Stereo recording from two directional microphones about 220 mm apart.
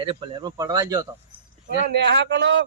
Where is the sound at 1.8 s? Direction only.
50° right (ahead or behind).